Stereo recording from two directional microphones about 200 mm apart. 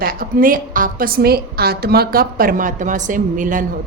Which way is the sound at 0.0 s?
45° right (ahead or behind).